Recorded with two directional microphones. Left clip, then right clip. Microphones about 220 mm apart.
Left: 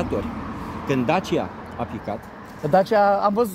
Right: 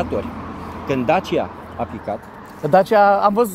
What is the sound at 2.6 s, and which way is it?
Speech, 20° right (ahead or behind).